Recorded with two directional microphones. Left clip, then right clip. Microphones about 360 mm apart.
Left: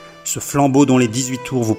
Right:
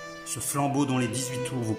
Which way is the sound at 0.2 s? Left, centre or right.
Left.